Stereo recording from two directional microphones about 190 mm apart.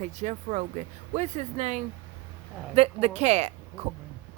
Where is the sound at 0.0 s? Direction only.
40° right (ahead or behind).